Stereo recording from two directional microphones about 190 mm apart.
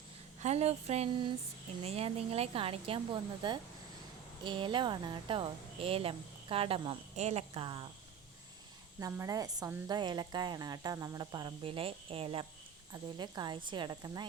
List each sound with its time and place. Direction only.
0.3 s a woman's voice: 35° right (ahead or behind)
9.0 s a woman's voice: 15° right (ahead or behind)